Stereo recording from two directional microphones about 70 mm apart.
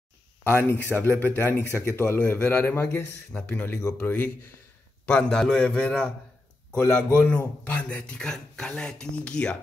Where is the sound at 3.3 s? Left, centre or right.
Centre.